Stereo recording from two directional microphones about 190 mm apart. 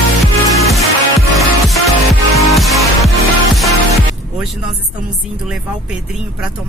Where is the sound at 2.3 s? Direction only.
Centre (ahead or behind).